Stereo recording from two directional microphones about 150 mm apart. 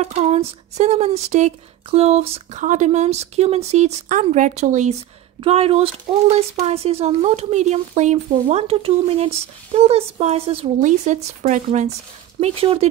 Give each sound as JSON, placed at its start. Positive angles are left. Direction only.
{"t": 0.0, "sound": "speech", "side_deg": -45}
{"t": 2.6, "sound": "speech", "side_deg": -55}
{"t": 10.8, "sound": "speech", "side_deg": -55}
{"t": 12.4, "sound": "speech", "side_deg": -40}